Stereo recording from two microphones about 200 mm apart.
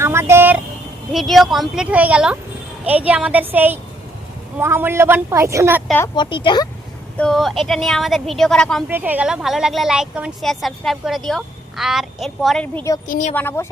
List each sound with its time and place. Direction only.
0.0 s a sound: 15° right (ahead or behind)
1.1 s a woman's voice: centre (ahead or behind)
6.1 s speech: 25° left (ahead or behind)
7.2 s speech: centre (ahead or behind)
8.9 s speech: 10° right (ahead or behind)
13.1 s a woman's voice: 40° left (ahead or behind)
13.3 s a woman's voice: 10° left (ahead or behind)